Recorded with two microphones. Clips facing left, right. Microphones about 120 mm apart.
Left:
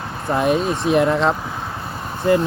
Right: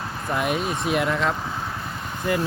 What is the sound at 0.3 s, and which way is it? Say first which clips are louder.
Speech: left 7 dB; 30° left (ahead or behind).